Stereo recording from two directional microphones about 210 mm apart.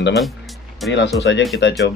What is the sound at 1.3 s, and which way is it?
Speech, 60° left (ahead or behind).